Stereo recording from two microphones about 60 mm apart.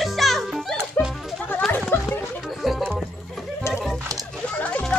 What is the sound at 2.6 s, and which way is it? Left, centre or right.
Music, centre.